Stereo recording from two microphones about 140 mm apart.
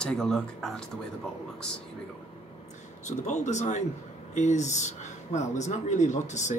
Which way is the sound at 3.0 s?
55° left (ahead or behind).